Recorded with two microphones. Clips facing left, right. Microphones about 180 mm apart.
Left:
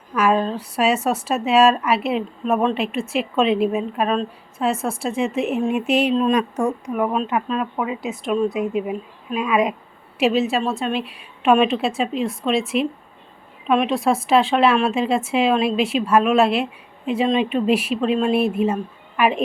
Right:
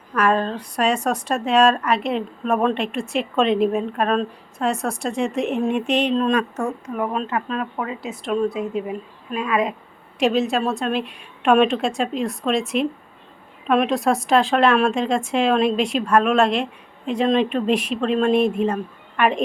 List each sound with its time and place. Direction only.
0.1 s a woman's voice: 5° left (ahead or behind)
8.0 s speech: 25° right (ahead or behind)
8.5 s a woman's voice: 10° left (ahead or behind)
10.2 s a woman's voice: 5° left (ahead or behind)